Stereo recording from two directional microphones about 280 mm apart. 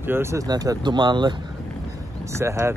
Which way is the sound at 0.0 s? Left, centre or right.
Centre.